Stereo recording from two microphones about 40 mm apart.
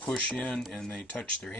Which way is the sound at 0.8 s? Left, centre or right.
Centre.